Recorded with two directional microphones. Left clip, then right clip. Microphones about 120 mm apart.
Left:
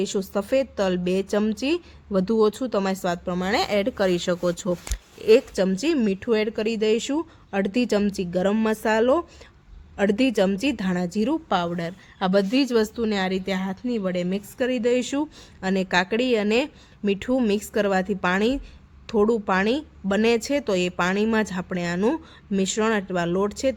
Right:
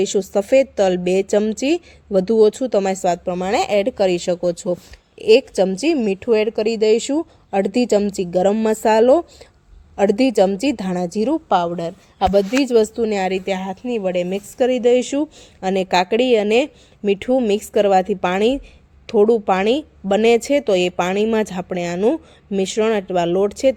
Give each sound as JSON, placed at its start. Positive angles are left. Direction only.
{"t": 0.0, "sound": "a woman's voice", "side_deg": -30}